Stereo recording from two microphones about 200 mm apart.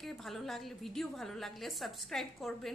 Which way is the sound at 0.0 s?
Centre (ahead or behind).